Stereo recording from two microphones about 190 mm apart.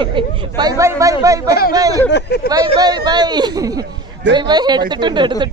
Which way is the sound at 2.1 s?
60° left (ahead or behind).